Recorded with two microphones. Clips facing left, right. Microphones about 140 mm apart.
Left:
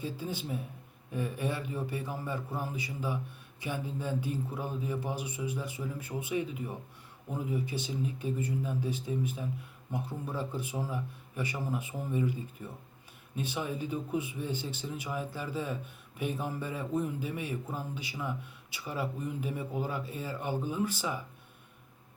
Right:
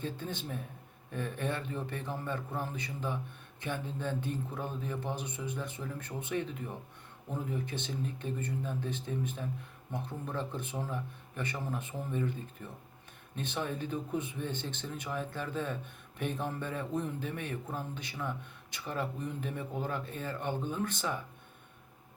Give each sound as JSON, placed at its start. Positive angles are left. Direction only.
{"t": 0.0, "sound": "speech", "side_deg": 10}